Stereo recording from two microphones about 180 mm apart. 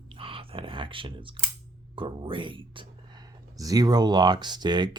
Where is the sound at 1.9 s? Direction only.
30° right (ahead or behind).